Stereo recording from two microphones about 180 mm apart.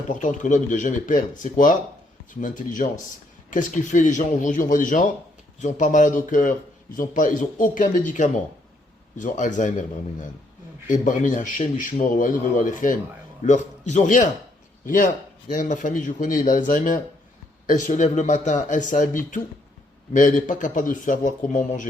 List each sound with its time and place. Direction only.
0.1 s a man's voice: 45° left (ahead or behind)
10.8 s a man's voice: 45° left (ahead or behind)